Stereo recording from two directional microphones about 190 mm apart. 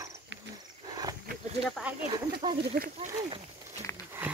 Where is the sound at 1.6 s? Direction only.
5° right (ahead or behind).